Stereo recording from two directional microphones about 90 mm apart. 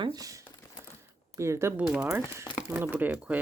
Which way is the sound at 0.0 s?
45° right (ahead or behind).